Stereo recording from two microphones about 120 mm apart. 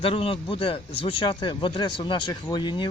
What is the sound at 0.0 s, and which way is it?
Speech, 50° left (ahead or behind).